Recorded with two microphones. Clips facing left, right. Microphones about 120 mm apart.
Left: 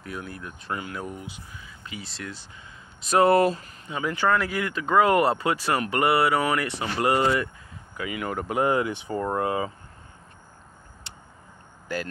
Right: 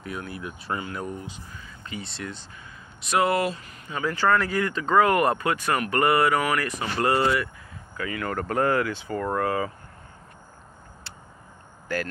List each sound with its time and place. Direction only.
0.0 s speech: centre (ahead or behind)
0.9 s speech: 5° left (ahead or behind)
3.1 s speech: 40° left (ahead or behind)
3.8 s speech: 15° left (ahead or behind)